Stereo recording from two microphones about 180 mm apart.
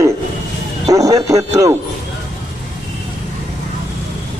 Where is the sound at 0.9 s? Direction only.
20° right (ahead or behind).